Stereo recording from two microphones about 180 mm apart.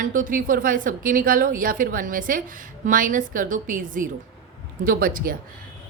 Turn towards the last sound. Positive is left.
turn(degrees=-50)  # may be behind; listen again after turning